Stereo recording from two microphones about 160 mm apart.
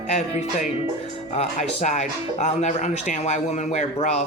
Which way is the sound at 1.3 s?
45° left (ahead or behind).